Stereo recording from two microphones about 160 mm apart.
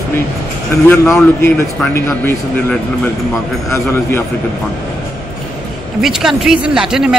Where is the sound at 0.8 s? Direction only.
15° left (ahead or behind).